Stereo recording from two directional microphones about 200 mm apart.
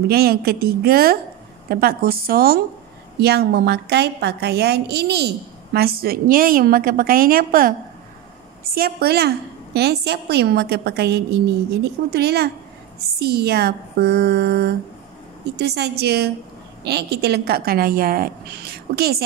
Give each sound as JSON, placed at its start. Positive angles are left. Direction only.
{"t": 0.1, "sound": "a woman's voice", "side_deg": -50}
{"t": 8.7, "sound": "a woman's voice", "side_deg": -50}